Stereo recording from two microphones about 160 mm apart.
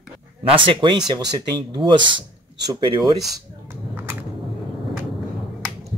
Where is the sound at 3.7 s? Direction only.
15° right (ahead or behind).